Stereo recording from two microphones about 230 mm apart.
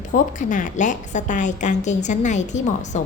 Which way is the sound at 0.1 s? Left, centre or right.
Left.